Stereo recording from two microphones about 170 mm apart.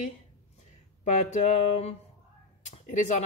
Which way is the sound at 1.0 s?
45° left (ahead or behind).